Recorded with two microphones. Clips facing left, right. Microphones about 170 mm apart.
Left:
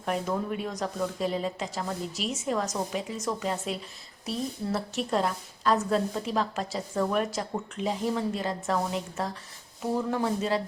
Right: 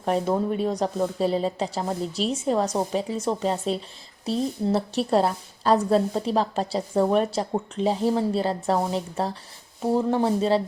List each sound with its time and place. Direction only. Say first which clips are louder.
0.0 s a woman's voice: right 6 dB; 35° right (ahead or behind)